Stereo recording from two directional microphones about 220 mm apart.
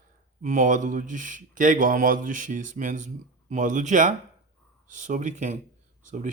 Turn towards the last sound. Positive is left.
turn(degrees=-35)  # may be behind; listen again after turning